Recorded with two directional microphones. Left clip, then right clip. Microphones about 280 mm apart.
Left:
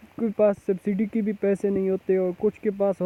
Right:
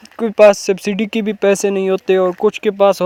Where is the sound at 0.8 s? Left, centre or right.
Right.